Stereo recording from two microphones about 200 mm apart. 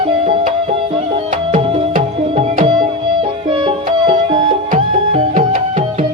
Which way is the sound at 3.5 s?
25° right (ahead or behind).